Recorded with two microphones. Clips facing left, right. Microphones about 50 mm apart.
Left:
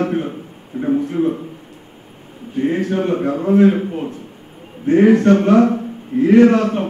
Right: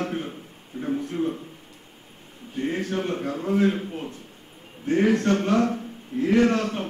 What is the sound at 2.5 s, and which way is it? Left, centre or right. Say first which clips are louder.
A man's voice: left 8 dB; centre.